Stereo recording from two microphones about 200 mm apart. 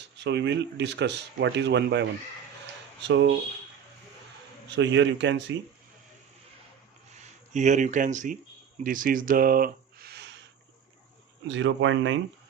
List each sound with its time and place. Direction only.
0.2 s speech: 60° right (ahead or behind)
4.7 s speech: 60° right (ahead or behind)
7.2 s speech: 35° right (ahead or behind); by 10.3 s 55° right (ahead or behind)
11.4 s speech: 70° right (ahead or behind)